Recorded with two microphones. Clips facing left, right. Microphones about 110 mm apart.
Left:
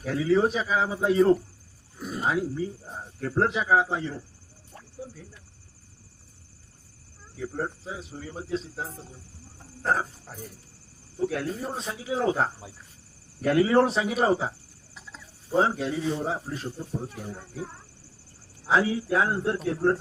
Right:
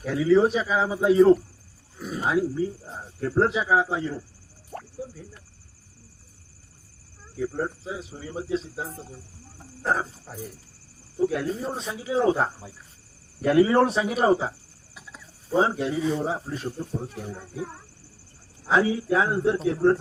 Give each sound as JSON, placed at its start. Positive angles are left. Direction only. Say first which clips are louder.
{"t": 0.0, "sound": "speech", "louder": "right 3 dB", "side_deg": 0}
{"t": 4.7, "sound": "a sound", "louder": "right 11 dB", "side_deg": -65}
{"t": 7.3, "sound": "speech", "louder": "right 3 dB", "side_deg": 0}
{"t": 14.9, "sound": "bird", "louder": "right 1 dB", "side_deg": -5}
{"t": 16.2, "sound": "speech", "louder": "right 2 dB", "side_deg": 0}
{"t": 18.6, "sound": "speech", "louder": "right 2 dB", "side_deg": 5}